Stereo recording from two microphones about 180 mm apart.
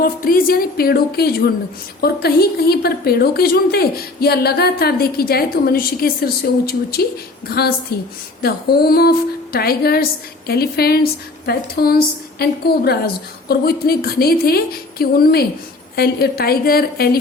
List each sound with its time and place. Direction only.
0.0 s a woman's voice: 55° left (ahead or behind)